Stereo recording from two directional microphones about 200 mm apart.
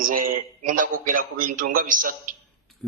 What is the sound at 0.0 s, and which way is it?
A man's voice, 45° right (ahead or behind).